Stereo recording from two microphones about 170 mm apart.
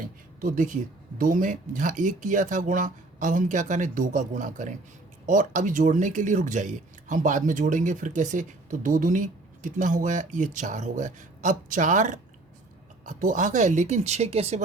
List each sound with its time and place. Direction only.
0.4 s speech: 50° right (ahead or behind)